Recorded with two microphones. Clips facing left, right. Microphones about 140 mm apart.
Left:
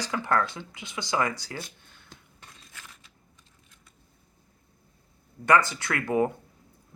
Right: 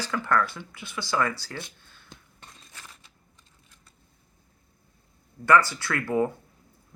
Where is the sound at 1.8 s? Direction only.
20° left (ahead or behind).